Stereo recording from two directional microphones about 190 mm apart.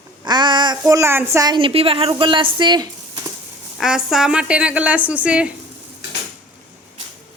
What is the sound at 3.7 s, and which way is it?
A woman's voice, centre (ahead or behind).